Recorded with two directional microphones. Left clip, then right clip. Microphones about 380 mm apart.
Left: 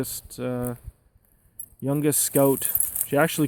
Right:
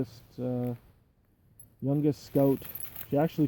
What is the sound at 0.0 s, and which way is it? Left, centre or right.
Speech, centre.